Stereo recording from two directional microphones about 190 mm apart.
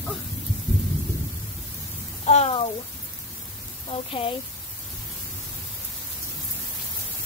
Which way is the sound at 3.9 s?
30° left (ahead or behind).